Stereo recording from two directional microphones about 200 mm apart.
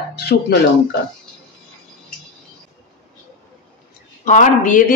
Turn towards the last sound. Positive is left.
turn(degrees=40)  # may be behind; listen again after turning